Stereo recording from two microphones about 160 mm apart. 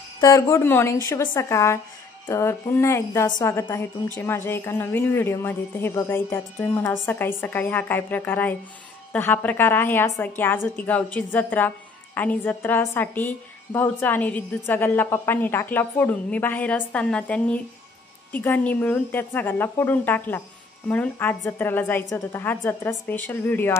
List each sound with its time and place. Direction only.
0.2 s a woman's voice: 20° left (ahead or behind)